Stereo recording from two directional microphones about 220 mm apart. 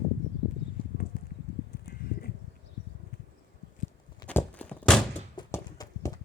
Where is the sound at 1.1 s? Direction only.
40° left (ahead or behind).